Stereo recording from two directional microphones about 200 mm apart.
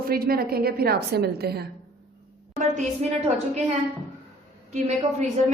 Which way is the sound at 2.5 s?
35° right (ahead or behind).